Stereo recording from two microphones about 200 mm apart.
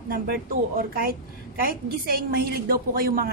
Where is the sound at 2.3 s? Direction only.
45° right (ahead or behind).